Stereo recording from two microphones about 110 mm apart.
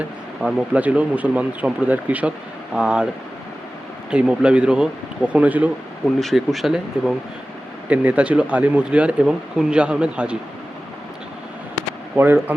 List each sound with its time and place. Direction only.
0.0 s speech: 10° right (ahead or behind)
4.1 s speech: 10° right (ahead or behind)
6.1 s speech: centre (ahead or behind)
12.1 s speech: 20° right (ahead or behind)